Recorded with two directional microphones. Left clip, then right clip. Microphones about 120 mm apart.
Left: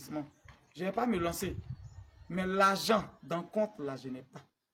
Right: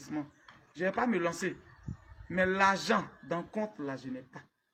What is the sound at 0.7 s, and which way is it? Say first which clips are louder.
A man's voice: right 2 dB; 50° left (ahead or behind).